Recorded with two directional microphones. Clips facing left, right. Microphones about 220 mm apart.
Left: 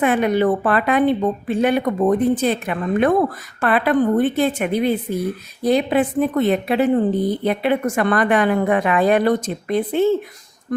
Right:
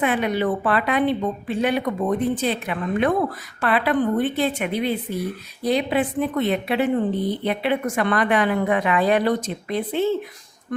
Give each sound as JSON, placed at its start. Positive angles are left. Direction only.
{"t": 0.0, "sound": "a woman's voice", "side_deg": 45}